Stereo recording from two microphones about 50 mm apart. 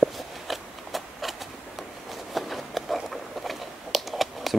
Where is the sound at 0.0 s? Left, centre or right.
Centre.